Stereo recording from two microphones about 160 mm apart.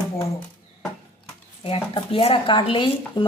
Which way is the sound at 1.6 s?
35° left (ahead or behind).